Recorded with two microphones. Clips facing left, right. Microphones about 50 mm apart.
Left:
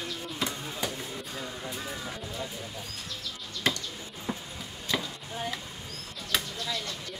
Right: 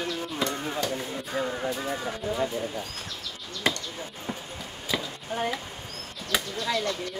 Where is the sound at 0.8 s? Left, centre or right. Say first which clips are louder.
Right 1 dB; centre.